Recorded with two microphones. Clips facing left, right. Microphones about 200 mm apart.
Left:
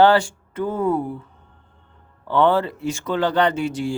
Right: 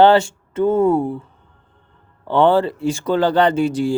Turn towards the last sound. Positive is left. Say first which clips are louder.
# right 5 dB
turn(degrees=-35)  # may be behind; listen again after turning